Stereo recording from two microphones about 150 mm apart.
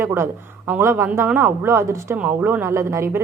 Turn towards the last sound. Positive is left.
turn(degrees=-20)  # may be behind; listen again after turning